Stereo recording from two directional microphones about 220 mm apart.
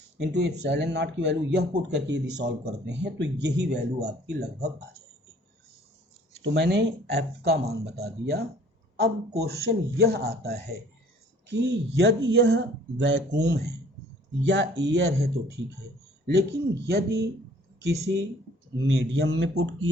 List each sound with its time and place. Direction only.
0.3 s speech: 50° right (ahead or behind)
6.4 s speech: 50° right (ahead or behind)
18.0 s speech: 50° right (ahead or behind)